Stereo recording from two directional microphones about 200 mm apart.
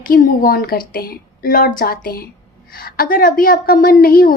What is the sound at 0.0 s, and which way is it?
Speech, 45° left (ahead or behind).